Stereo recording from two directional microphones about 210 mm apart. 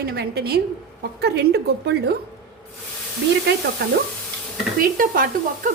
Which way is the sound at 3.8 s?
50° right (ahead or behind).